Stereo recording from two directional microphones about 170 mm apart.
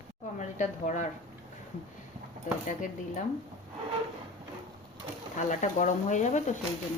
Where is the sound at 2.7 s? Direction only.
45° left (ahead or behind).